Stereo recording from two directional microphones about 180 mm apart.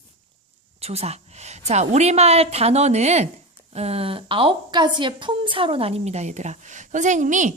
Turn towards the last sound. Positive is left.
turn(degrees=-45)  # may be behind; listen again after turning